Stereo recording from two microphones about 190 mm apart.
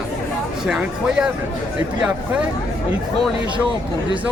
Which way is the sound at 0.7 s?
5° right (ahead or behind).